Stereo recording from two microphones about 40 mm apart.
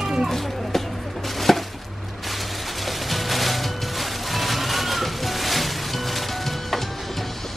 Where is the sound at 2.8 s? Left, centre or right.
Centre.